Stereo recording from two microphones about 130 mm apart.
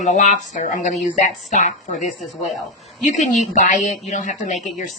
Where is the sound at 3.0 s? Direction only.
70° left (ahead or behind).